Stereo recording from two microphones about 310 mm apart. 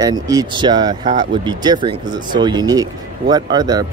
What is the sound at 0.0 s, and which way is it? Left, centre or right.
Speech, centre.